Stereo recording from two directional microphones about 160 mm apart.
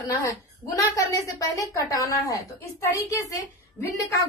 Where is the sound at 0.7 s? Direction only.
20° left (ahead or behind).